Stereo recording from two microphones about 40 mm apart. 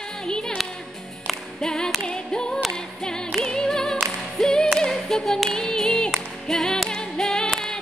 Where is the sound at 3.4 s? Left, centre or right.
Centre.